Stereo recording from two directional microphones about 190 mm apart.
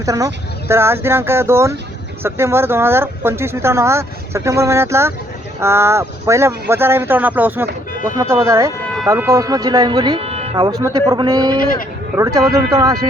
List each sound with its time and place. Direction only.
0.0 s speech: 15° right (ahead or behind)
10.6 s speech: 20° right (ahead or behind)